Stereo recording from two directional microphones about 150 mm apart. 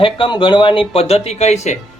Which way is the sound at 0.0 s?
35° left (ahead or behind).